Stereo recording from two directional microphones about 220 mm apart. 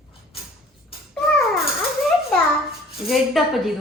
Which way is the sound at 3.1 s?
Centre (ahead or behind).